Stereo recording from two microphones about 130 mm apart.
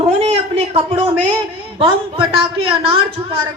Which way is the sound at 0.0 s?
55° right (ahead or behind).